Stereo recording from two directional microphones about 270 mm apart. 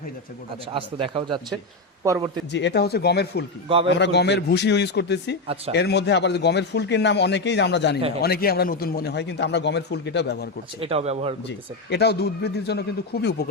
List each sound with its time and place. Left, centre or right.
0.7 s speech: centre
2.5 s a man's voice: left
10.8 s speech: right
11.4 s a man's voice: left